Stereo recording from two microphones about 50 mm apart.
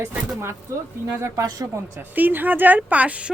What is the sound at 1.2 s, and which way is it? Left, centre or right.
Speech, right.